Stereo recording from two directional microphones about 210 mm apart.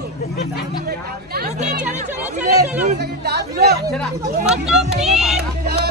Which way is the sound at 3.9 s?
5° right (ahead or behind).